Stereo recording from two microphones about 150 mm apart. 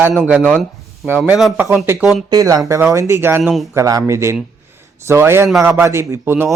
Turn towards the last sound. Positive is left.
turn(degrees=-15)  # may be behind; listen again after turning